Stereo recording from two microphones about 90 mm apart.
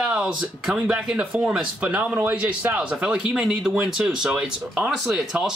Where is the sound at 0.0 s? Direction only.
5° right (ahead or behind).